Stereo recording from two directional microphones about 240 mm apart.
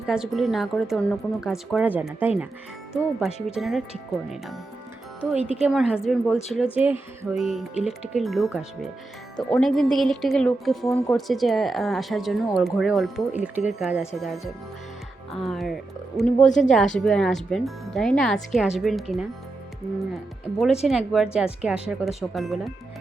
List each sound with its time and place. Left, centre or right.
0.0 s speech: centre
5.4 s a woman's voice: left
5.6 s speech: centre
15.4 s speech: centre
20.8 s speech: centre